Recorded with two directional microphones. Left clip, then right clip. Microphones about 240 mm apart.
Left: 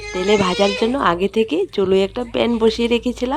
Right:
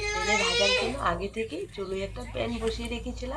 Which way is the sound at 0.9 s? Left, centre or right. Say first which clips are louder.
Left 12 dB; left.